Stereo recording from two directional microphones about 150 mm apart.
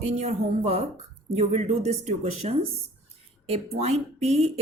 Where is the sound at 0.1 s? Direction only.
50° right (ahead or behind).